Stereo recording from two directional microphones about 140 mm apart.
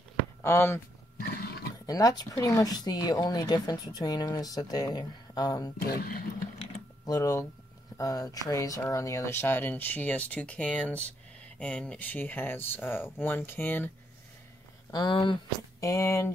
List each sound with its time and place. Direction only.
0.4 s speech: 15° left (ahead or behind)
1.1 s roaring cats: 90° left
1.9 s speech: 25° left (ahead or behind)
5.9 s speech: 90° left
7.1 s speech: 25° left (ahead or behind)
14.9 s speech: 30° left (ahead or behind)
15.8 s speech: 20° left (ahead or behind)